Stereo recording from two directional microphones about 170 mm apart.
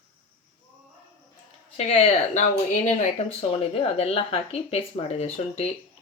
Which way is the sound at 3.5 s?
35° left (ahead or behind).